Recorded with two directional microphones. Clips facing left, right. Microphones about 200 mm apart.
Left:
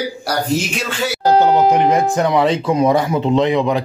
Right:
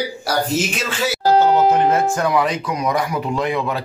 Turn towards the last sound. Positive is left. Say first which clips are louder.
# left 6 dB
turn(degrees=20)  # may be behind; listen again after turning